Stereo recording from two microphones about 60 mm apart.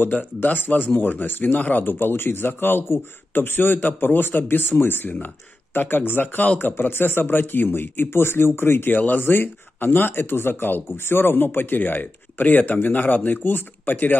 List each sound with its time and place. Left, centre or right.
0.0 s speech: left